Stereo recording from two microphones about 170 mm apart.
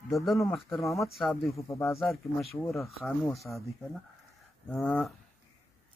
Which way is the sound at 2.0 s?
Centre (ahead or behind).